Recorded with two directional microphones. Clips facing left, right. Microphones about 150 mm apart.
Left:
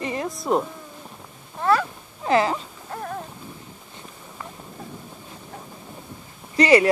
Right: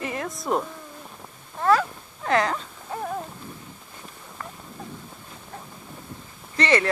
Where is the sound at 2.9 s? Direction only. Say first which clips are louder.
Right 2 dB; 5° right (ahead or behind).